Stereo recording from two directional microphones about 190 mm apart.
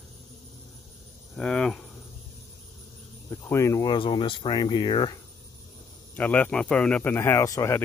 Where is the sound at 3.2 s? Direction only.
15° left (ahead or behind).